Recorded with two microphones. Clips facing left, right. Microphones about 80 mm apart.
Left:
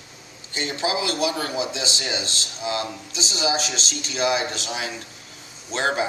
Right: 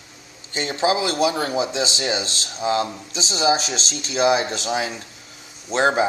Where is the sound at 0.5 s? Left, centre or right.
Right.